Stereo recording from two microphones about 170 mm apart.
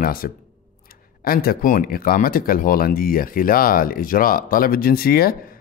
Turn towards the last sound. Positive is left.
turn(degrees=60)  # may be behind; listen again after turning